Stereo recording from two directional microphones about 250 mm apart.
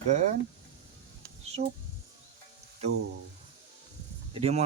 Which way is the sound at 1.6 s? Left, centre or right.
Right.